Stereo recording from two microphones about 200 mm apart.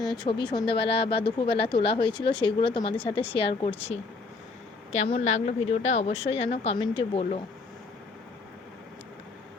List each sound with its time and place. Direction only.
0.0 s speech: 20° left (ahead or behind)
4.9 s a woman's voice: 30° left (ahead or behind)